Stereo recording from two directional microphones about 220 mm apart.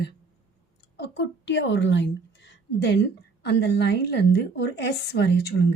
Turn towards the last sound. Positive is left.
turn(degrees=50)  # may be behind; listen again after turning